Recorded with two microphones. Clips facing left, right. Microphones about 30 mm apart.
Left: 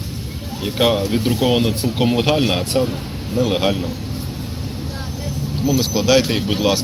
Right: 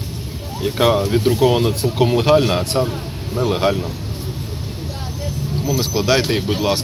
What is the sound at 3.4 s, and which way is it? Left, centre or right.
Speech, left.